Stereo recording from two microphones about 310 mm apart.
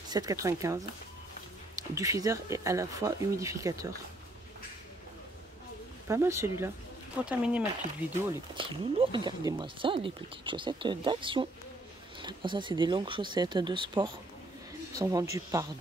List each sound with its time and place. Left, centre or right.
0.1 s speech: centre
1.8 s speech: centre
6.0 s speech: centre
8.5 s speech: centre